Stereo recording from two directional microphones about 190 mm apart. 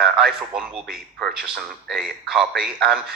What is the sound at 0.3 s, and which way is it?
Speech, 5° right (ahead or behind).